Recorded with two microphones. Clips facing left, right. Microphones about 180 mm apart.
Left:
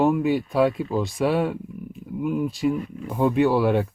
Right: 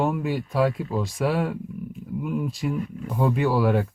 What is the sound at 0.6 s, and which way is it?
Speech, 30° left (ahead or behind).